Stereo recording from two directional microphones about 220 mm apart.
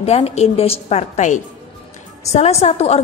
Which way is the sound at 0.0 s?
30° left (ahead or behind).